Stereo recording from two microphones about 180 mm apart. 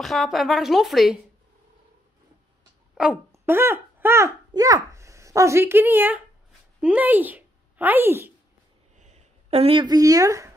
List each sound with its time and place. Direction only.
0.0 s a woman's voice: centre (ahead or behind)
3.3 s speech: 15° right (ahead or behind)
8.9 s a sound: 40° right (ahead or behind); by 10.5 s 20° right (ahead or behind)